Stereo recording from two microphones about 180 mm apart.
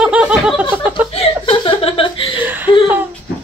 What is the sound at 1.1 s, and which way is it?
Laughter, 30° left (ahead or behind).